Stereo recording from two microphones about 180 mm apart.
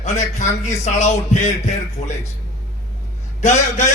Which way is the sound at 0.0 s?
40° left (ahead or behind).